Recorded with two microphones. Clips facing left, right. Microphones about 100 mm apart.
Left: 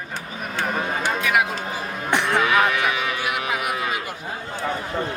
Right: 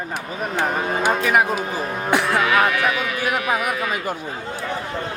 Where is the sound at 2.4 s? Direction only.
15° right (ahead or behind).